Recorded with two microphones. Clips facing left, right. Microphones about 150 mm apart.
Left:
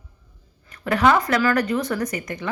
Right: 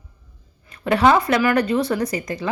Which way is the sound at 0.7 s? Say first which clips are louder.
Right 2 dB; 25° right (ahead or behind).